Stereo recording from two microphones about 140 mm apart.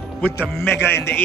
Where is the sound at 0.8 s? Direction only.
15° left (ahead or behind).